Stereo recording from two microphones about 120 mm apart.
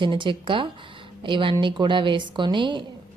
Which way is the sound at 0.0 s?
45° right (ahead or behind).